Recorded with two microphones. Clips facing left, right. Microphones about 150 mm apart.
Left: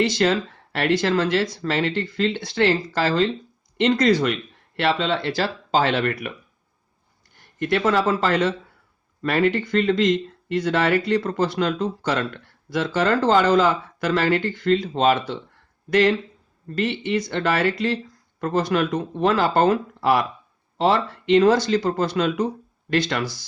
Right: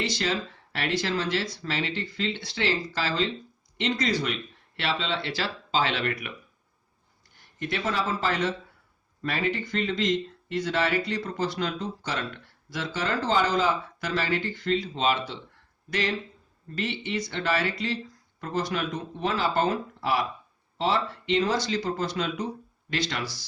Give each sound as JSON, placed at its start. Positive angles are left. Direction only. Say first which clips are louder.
{"t": 0.0, "sound": "speech", "louder": "left 9 dB", "side_deg": 55}
{"t": 7.6, "sound": "speech", "louder": "left 9 dB", "side_deg": 60}